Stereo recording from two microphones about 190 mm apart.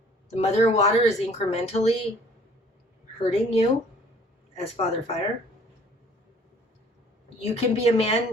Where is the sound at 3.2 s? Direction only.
35° left (ahead or behind).